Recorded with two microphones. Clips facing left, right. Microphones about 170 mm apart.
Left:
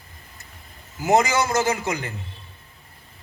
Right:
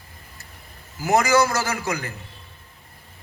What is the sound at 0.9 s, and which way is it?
A man's voice, 20° left (ahead or behind).